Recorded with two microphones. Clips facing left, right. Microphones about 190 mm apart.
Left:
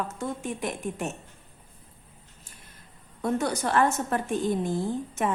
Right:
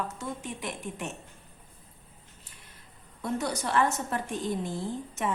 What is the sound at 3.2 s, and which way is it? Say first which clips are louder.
Speech: left 4 dB; 50° left (ahead or behind).